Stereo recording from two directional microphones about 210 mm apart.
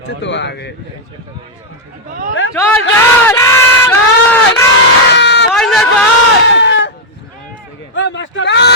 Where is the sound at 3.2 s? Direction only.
10° left (ahead or behind).